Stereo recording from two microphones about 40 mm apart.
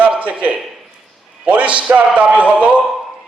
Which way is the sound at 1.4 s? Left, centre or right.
Right.